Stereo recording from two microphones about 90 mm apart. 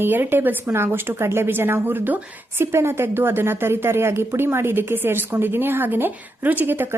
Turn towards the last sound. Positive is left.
turn(degrees=-25)  # may be behind; listen again after turning